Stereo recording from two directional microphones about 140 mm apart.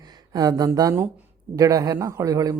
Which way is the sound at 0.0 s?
30° right (ahead or behind).